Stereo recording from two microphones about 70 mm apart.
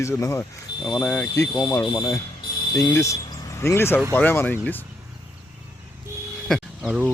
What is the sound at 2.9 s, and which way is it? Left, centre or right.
Speech, left.